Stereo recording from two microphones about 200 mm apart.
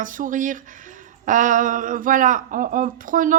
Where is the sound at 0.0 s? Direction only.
40° right (ahead or behind).